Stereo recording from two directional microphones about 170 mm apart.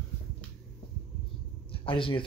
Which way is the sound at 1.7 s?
30° left (ahead or behind).